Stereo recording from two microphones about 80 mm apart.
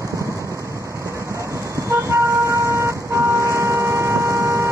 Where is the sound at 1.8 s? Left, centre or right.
Right.